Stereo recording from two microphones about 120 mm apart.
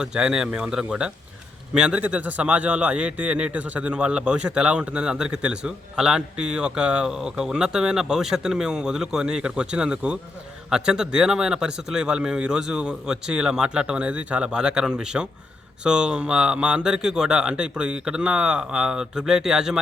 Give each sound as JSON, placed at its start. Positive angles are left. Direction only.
{"t": 0.0, "sound": "a man's voice", "side_deg": -5}